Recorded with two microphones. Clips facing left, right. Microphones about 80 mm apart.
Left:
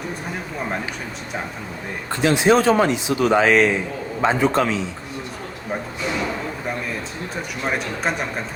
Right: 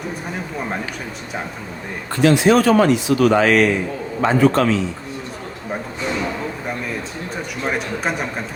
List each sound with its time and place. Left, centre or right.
2.1 s speech: left
7.6 s a man's voice: centre